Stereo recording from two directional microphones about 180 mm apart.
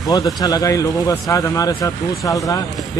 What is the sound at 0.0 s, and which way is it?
A man's voice, 20° left (ahead or behind).